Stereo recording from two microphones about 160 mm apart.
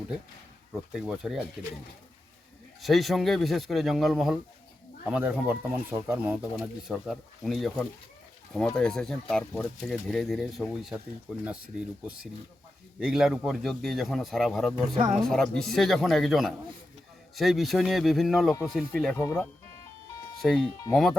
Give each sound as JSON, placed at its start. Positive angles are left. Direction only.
{"t": 0.7, "sound": "a man's voice", "side_deg": -5}
{"t": 2.8, "sound": "a man's voice", "side_deg": 0}
{"t": 13.0, "sound": "a man's voice", "side_deg": -5}
{"t": 19.1, "sound": "speech", "side_deg": 20}
{"t": 20.4, "sound": "a man's voice", "side_deg": 0}